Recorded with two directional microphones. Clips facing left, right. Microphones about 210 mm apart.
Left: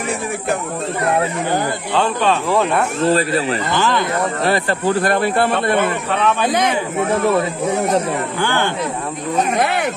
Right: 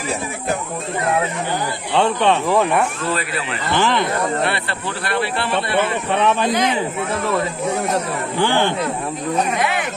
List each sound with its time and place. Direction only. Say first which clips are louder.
2.2 s speech: even; 15° right (ahead or behind)
3.0 s speech: left 8 dB; 40° left (ahead or behind)
3.7 s speech: right 2 dB; 20° right (ahead or behind)
4.4 s speech: left 5 dB; 40° left (ahead or behind)
9.6 s speech: left 3 dB; 45° left (ahead or behind)